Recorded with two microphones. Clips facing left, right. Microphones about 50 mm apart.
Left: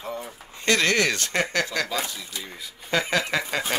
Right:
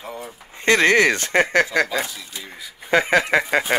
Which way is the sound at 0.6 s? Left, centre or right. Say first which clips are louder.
Right 6 dB; right.